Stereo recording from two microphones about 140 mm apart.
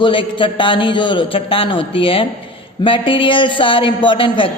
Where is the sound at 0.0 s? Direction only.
35° left (ahead or behind).